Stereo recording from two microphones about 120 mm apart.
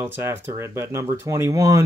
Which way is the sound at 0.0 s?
15° right (ahead or behind).